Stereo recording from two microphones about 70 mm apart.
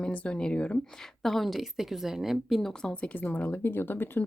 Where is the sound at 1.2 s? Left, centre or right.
Centre.